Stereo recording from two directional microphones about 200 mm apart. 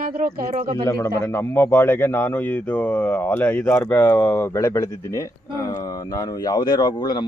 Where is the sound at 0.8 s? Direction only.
15° left (ahead or behind).